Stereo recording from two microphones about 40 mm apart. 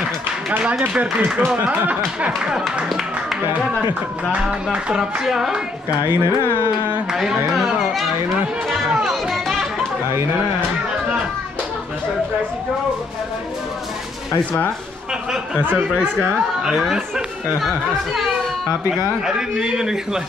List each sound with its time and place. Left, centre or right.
0.7 s speech: right
5.2 s a man's voice: centre
6.0 s carnatic music: right
9.0 s music: centre
17.6 s speech: centre
19.2 s a man's voice: centre